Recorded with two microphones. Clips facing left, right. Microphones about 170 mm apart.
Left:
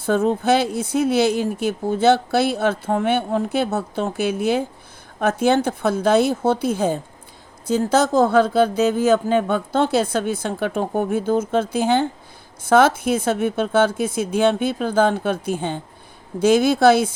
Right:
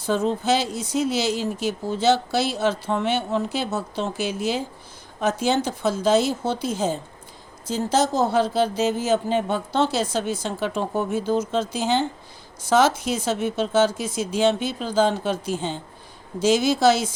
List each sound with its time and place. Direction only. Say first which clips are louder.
0.0 s speech: left 4 dB; 55° left (ahead or behind)